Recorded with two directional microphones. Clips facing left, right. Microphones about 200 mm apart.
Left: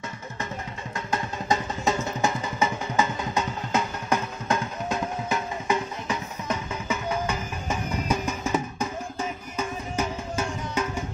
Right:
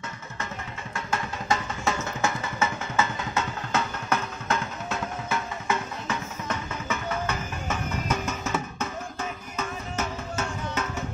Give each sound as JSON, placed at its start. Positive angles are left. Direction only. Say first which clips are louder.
{"t": 0.9, "sound": "a sound", "louder": "left 1 dB", "side_deg": 20}
{"t": 2.2, "sound": "vehicle", "louder": "left 1 dB", "side_deg": 15}
{"t": 9.6, "sound": "tabla", "louder": "left 3 dB", "side_deg": 10}